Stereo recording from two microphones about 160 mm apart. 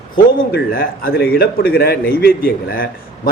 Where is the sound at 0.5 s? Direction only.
70° left (ahead or behind).